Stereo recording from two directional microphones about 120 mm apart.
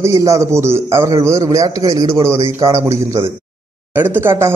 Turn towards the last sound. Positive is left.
turn(degrees=-20)  # may be behind; listen again after turning